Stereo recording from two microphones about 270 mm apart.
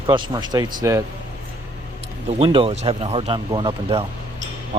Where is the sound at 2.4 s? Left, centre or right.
Centre.